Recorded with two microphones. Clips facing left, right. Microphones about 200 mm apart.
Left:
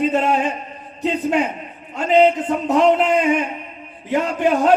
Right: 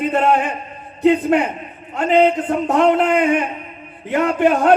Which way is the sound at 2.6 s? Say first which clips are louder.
Even; 55° right (ahead or behind).